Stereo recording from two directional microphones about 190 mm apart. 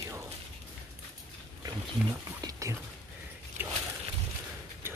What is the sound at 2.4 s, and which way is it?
Whispering, 20° right (ahead or behind).